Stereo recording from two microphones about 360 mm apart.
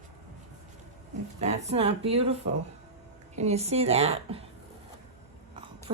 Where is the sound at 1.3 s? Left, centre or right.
Centre.